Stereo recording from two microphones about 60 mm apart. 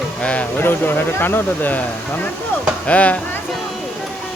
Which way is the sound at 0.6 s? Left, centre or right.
Left.